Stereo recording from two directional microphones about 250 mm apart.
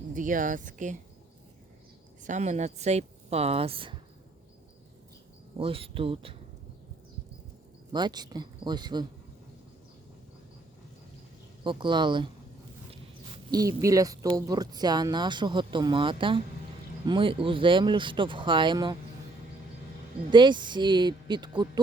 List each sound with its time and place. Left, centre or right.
0.1 s speech: right
2.2 s speech: right
5.5 s speech: right
7.9 s speech: centre
11.6 s speech: centre
20.3 s speech: centre